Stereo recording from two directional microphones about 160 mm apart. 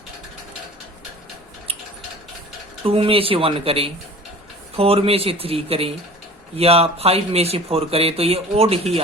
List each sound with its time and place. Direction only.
2.8 s speech: 35° right (ahead or behind)